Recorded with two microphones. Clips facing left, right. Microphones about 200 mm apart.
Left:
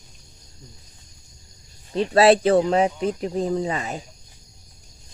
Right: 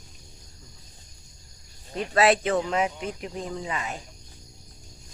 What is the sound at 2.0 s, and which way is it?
Speech, 30° left (ahead or behind).